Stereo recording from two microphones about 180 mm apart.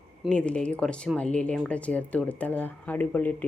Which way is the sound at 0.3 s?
5° left (ahead or behind).